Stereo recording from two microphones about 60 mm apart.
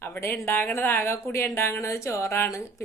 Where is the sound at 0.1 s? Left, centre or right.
Left.